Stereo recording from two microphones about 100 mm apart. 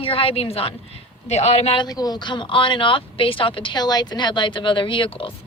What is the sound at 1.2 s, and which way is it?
Speech, 90° left.